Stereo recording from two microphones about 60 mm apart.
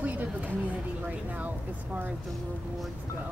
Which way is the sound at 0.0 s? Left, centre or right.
Right.